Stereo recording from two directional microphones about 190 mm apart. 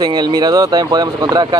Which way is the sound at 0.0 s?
25° right (ahead or behind).